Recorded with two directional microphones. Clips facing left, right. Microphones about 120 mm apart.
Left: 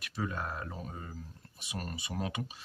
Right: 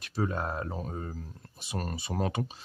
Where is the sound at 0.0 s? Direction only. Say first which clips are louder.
Right 5 dB; 30° right (ahead or behind).